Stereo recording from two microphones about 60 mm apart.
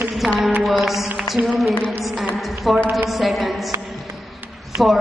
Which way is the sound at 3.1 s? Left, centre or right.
Centre.